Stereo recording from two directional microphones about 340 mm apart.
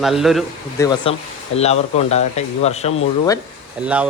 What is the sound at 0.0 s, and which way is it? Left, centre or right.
Speech, centre.